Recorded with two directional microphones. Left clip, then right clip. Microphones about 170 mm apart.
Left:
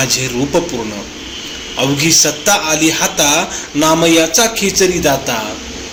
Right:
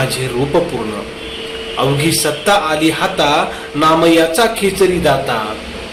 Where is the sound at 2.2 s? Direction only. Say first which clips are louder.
Even; 35° left (ahead or behind).